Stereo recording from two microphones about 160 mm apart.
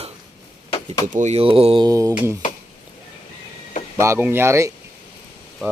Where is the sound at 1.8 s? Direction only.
20° right (ahead or behind).